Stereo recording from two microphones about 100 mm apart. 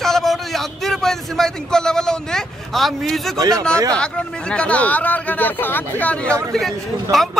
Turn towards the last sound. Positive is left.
turn(degrees=0)  # may be behind; listen again after turning